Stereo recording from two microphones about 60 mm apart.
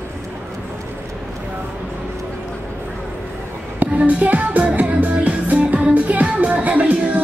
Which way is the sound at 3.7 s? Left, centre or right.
Right.